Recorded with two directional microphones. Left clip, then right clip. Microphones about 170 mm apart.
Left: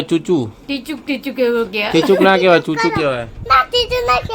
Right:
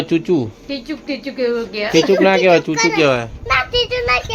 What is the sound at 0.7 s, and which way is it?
A woman's voice, 90° left.